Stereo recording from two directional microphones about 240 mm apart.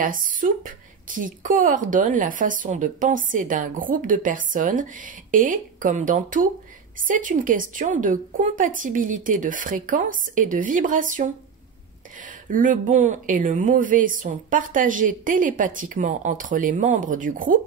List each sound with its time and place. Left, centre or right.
0.0 s a woman's voice: right